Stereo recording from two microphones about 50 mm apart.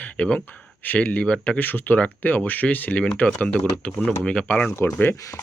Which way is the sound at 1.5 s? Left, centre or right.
Left.